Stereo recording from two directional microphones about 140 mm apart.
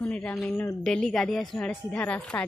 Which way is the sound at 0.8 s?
5° left (ahead or behind).